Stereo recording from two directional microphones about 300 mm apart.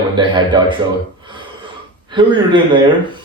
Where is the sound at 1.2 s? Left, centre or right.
Centre.